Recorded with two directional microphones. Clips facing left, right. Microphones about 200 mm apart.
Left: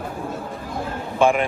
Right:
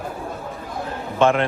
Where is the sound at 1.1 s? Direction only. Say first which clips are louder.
Even; 10° left (ahead or behind).